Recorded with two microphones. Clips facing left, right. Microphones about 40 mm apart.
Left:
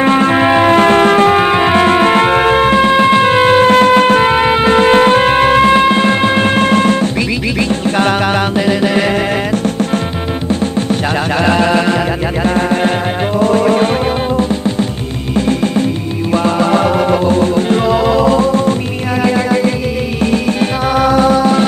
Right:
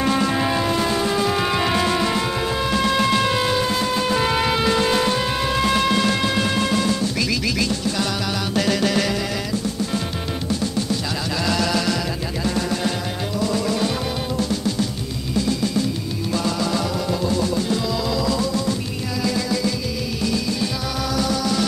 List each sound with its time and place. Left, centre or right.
0.0 s music: left
4.3 s music: left
8.5 s music: left
11.4 s music: left
15.3 s music: left
21.0 s music: left